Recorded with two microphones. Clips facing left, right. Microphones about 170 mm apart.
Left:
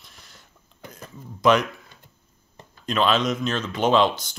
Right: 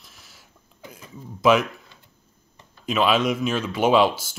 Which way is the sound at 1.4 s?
5° right (ahead or behind).